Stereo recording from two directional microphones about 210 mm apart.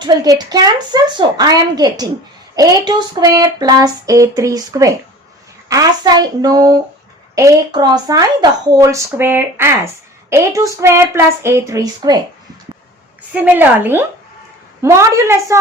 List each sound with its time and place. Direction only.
0.0 s a woman's voice: 20° right (ahead or behind)
13.3 s speech: 10° right (ahead or behind)